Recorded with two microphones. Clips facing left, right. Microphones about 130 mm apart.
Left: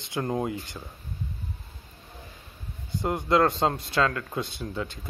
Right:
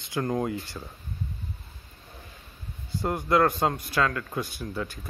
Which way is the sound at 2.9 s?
20° left (ahead or behind).